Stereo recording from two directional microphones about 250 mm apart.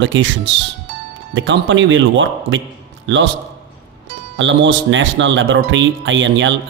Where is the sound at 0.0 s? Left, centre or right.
Right.